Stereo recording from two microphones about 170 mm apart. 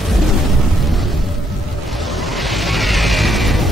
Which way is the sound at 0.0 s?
Centre (ahead or behind).